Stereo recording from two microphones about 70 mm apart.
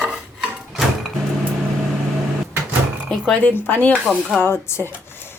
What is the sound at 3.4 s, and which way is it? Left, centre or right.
A woman's voice, left.